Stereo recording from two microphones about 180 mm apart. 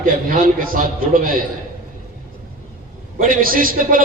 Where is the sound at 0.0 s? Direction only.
50° right (ahead or behind).